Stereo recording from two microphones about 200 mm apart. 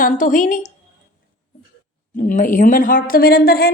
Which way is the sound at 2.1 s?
40° left (ahead or behind).